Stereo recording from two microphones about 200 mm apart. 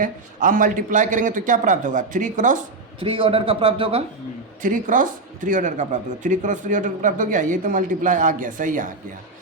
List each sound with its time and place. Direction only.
0.0 s speech: 40° right (ahead or behind)
3.0 s a man's voice: 30° right (ahead or behind)
4.6 s speech: 40° right (ahead or behind)